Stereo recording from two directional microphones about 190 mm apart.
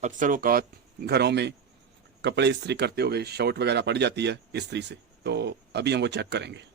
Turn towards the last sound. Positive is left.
turn(degrees=-65)  # may be behind; listen again after turning